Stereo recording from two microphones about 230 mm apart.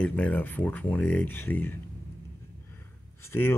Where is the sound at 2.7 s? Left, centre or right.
Centre.